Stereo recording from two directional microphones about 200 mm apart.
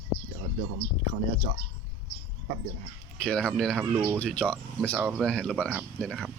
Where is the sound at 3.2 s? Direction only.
5° left (ahead or behind).